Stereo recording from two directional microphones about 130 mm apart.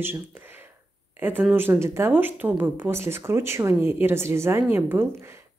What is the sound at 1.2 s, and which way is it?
Speech, 15° right (ahead or behind).